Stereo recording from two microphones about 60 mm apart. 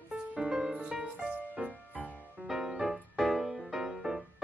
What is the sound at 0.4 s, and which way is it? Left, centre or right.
Music, centre.